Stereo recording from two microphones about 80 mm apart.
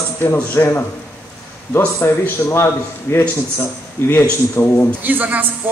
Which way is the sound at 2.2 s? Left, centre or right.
Left.